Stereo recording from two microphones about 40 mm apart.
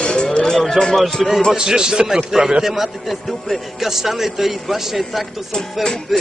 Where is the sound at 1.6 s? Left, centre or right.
Centre.